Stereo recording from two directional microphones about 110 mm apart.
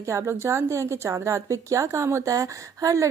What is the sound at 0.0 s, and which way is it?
A woman's voice, 25° right (ahead or behind).